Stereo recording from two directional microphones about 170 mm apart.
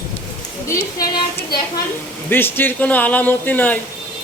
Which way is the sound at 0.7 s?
15° left (ahead or behind).